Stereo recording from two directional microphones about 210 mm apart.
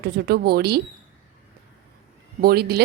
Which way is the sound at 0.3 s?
50° right (ahead or behind).